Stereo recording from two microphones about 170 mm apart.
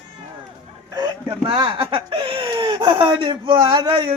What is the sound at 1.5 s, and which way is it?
Speech, 25° right (ahead or behind).